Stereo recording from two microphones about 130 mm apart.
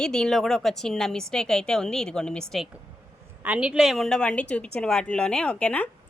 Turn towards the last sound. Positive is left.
turn(degrees=10)  # may be behind; listen again after turning